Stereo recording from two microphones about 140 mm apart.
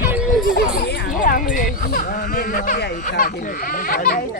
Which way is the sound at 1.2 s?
75° left (ahead or behind).